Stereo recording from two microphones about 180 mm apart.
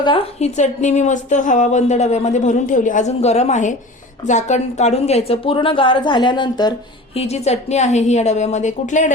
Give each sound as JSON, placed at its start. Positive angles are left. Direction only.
{"t": 0.0, "sound": "a woman's voice", "side_deg": 30}
{"t": 7.2, "sound": "a woman's voice", "side_deg": 35}